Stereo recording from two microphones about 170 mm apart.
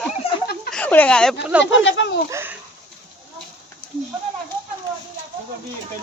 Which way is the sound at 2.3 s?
15° right (ahead or behind).